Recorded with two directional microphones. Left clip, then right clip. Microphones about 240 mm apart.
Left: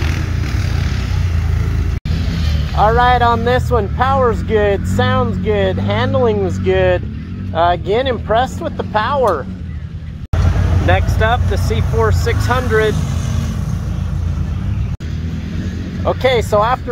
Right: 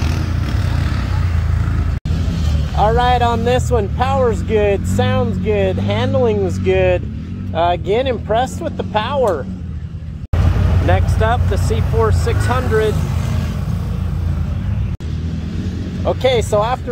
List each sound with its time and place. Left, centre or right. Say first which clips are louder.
2.8 s speech: left 3 dB; centre
10.9 s speech: left 2 dB; centre
16.0 s speech: left 1 dB; centre